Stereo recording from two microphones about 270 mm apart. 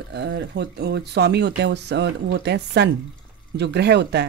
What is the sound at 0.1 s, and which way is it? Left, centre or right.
Speech, right.